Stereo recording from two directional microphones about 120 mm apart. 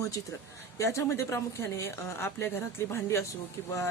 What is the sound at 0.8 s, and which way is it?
A woman's voice, 25° left (ahead or behind).